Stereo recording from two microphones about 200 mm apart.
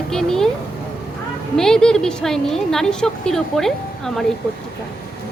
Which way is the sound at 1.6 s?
5° left (ahead or behind).